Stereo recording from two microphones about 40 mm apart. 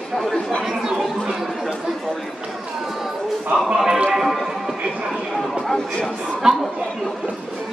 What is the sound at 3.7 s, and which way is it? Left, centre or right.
Speech, centre.